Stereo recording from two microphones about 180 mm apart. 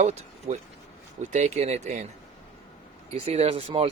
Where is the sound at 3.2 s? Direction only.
35° right (ahead or behind).